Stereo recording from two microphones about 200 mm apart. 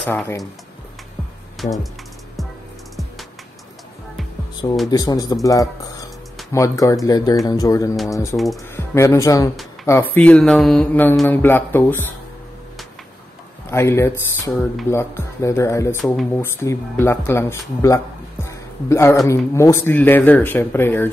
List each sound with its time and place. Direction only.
0.0 s speech: 10° left (ahead or behind)
1.6 s speech: centre (ahead or behind)
4.9 s speech: 20° left (ahead or behind)
13.7 s speech: 15° left (ahead or behind)